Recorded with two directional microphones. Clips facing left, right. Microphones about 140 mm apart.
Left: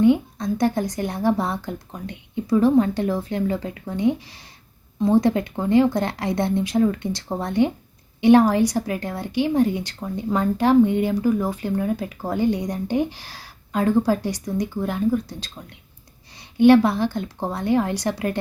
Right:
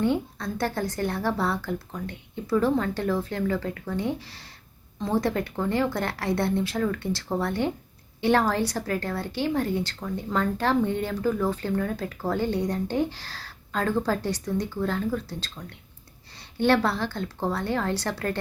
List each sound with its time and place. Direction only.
0.0 s speech: 15° left (ahead or behind)
16.6 s speech: 15° left (ahead or behind)